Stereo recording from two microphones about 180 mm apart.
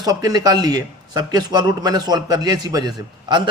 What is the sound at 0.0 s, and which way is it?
A man's voice, 20° right (ahead or behind).